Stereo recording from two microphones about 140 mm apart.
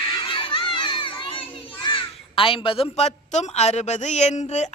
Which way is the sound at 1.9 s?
40° left (ahead or behind).